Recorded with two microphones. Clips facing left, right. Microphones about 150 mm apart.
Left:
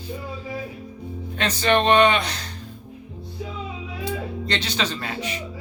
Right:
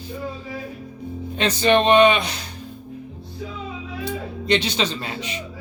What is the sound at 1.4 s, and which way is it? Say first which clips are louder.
Speech: right 3 dB; 15° right (ahead or behind).